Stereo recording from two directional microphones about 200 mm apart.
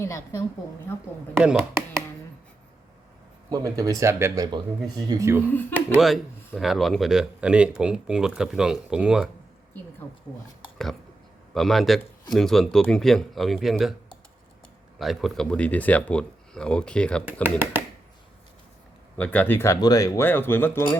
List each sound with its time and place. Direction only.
0.0 s speech: 15° left (ahead or behind)
1.3 s speech: 5° right (ahead or behind)
3.5 s speech: 20° right (ahead or behind)
5.7 s speech: 5° right (ahead or behind)
11.5 s speech: centre (ahead or behind)
14.9 s speech: centre (ahead or behind)
17.4 s speech: 10° right (ahead or behind)
19.1 s speech: 5° left (ahead or behind)